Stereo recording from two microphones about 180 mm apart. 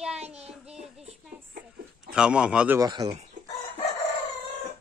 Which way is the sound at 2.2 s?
5° right (ahead or behind).